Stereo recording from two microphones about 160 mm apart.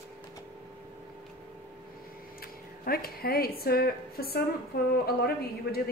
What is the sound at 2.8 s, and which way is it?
A woman's voice, 65° left (ahead or behind).